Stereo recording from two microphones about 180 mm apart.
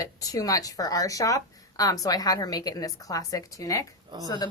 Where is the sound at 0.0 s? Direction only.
20° left (ahead or behind).